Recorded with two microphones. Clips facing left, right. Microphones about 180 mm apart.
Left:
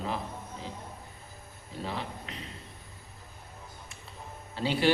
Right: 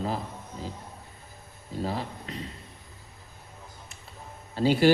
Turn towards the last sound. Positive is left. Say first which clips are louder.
# right 7 dB
turn(degrees=-40)  # may be behind; listen again after turning